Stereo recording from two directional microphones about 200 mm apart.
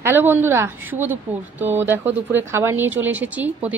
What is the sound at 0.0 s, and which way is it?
Speech, 10° right (ahead or behind).